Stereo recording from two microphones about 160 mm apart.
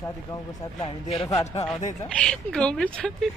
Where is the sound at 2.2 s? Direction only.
5° left (ahead or behind).